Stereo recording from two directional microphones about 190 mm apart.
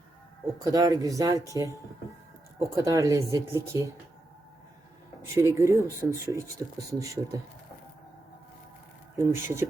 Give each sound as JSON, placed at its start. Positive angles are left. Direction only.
{"t": 0.6, "sound": "speech", "side_deg": -20}
{"t": 5.3, "sound": "speech", "side_deg": -15}
{"t": 9.1, "sound": "speech", "side_deg": -15}